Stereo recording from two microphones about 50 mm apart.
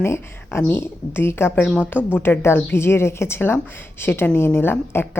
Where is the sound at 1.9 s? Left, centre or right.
Right.